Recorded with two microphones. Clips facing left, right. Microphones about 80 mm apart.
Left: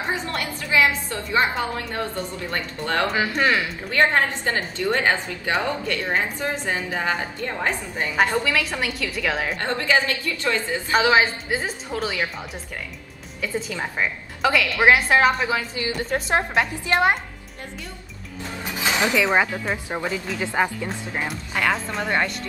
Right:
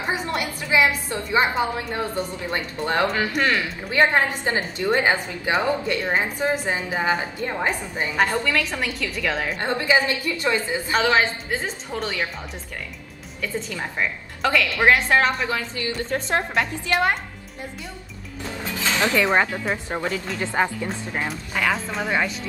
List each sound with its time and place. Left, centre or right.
0.1 s a woman's voice: centre
3.1 s a woman's voice: centre
4.1 s a woman's voice: centre
8.2 s a woman's voice: centre
9.6 s a woman's voice: centre
10.9 s a woman's voice: centre
13.4 s a woman's voice: centre
18.8 s a sound: centre
19.2 s a woman's voice: centre
19.9 s a woman's voice: centre